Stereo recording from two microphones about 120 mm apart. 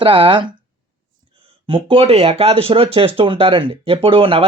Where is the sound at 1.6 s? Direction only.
50° right (ahead or behind).